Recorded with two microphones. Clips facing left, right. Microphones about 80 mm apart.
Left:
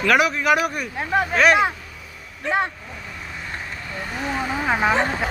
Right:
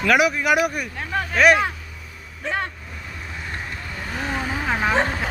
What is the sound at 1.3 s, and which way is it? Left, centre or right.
Speech, centre.